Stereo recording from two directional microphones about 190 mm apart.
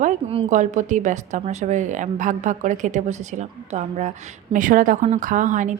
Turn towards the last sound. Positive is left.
turn(degrees=-40)  # may be behind; listen again after turning